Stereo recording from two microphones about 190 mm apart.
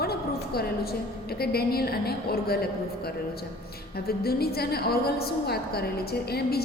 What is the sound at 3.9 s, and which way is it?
A woman's voice, 55° left (ahead or behind).